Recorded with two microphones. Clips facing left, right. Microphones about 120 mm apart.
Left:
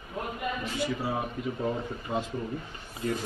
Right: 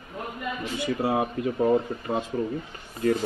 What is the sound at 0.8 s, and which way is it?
Speech, 60° right (ahead or behind).